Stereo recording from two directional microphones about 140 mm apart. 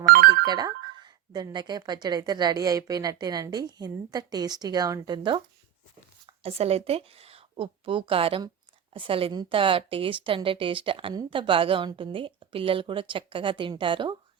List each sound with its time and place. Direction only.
0.0 s telephone bell ringing: 90° right
0.4 s speech: 30° right (ahead or behind)
6.2 s a woman's voice: 45° right (ahead or behind)